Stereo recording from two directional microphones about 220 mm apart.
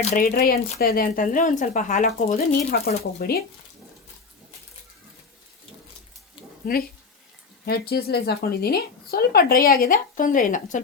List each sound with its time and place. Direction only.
0.1 s speech: 40° left (ahead or behind)
6.6 s speech: 40° left (ahead or behind)